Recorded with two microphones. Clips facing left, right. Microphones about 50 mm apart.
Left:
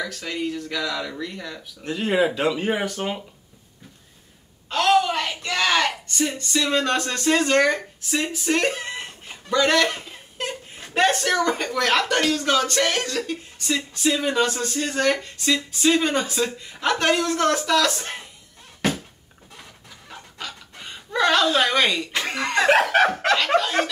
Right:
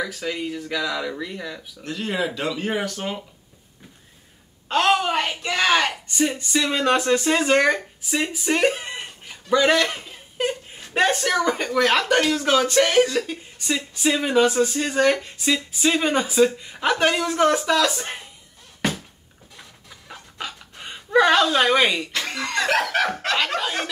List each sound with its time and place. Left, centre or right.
0.0 s speech: centre
1.8 s speech: centre
4.6 s a woman's voice: right; by 18.2 s centre
20.3 s pant: centre
21.5 s speech: centre
22.1 s speech: centre